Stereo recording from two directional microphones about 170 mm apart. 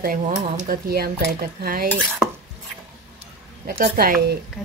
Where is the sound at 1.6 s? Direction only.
60° right (ahead or behind).